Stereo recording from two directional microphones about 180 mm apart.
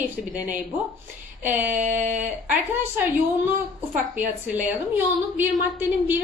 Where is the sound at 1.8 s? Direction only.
40° right (ahead or behind).